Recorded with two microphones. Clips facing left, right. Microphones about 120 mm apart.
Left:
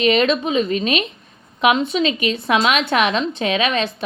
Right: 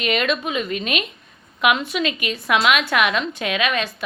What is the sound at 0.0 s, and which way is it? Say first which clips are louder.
A woman's voice: left 5 dB; 30° left (ahead or behind).